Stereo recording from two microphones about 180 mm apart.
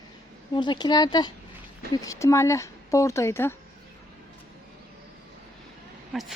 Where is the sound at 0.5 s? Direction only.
25° left (ahead or behind).